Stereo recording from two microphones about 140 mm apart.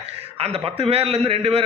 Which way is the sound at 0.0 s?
45° right (ahead or behind).